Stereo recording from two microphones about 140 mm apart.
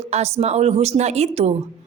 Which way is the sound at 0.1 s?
50° right (ahead or behind).